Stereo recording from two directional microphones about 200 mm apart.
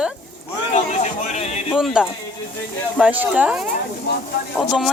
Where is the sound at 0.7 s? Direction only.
35° left (ahead or behind).